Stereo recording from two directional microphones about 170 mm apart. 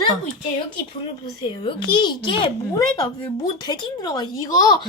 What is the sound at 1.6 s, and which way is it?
Speech, 30° left (ahead or behind).